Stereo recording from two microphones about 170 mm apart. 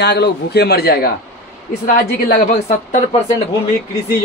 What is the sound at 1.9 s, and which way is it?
A woman's voice, 55° left (ahead or behind).